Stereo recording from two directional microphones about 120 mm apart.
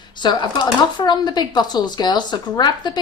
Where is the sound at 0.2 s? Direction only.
35° left (ahead or behind).